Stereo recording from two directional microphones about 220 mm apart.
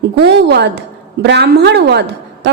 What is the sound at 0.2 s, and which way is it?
A woman's voice, 50° right (ahead or behind).